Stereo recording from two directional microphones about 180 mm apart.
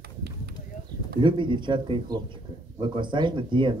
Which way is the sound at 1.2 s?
25° right (ahead or behind).